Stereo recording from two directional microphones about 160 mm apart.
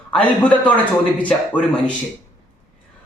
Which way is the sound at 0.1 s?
5° left (ahead or behind).